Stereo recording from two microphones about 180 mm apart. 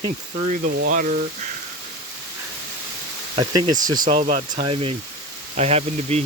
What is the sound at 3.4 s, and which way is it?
Speech, 20° right (ahead or behind).